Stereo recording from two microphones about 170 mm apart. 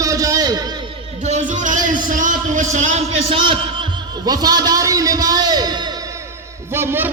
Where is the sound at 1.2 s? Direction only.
45° right (ahead or behind); by 5.9 s 25° right (ahead or behind).